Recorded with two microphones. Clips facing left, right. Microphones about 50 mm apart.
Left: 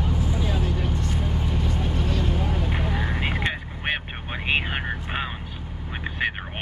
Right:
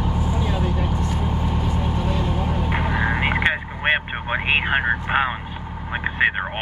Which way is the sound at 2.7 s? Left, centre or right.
Right.